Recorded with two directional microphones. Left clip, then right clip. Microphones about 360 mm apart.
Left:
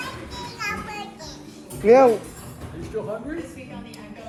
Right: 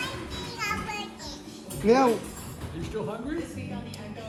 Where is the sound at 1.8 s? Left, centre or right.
Centre.